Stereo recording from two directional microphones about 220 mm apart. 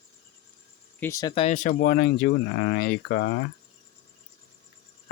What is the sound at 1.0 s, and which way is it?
Speech, 15° left (ahead or behind).